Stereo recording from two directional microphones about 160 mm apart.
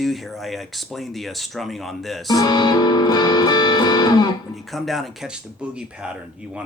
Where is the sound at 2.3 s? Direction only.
25° left (ahead or behind).